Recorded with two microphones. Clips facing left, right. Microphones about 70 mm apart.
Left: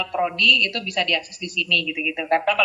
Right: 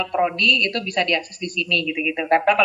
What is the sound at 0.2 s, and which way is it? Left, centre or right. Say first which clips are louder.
Speech: right 1 dB; right.